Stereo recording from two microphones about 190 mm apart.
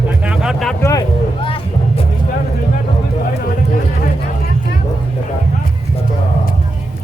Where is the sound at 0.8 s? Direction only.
20° left (ahead or behind).